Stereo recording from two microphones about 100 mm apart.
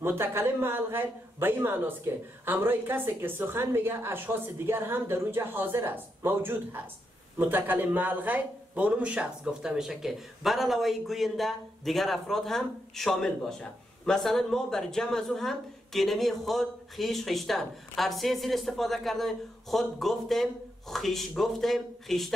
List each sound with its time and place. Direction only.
0.0 s a woman's voice: 25° right (ahead or behind); by 22.3 s centre (ahead or behind)